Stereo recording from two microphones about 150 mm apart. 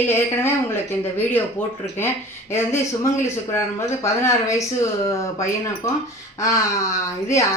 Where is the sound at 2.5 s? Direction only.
15° left (ahead or behind).